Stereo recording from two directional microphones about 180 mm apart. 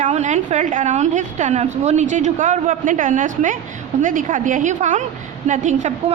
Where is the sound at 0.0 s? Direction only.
40° right (ahead or behind).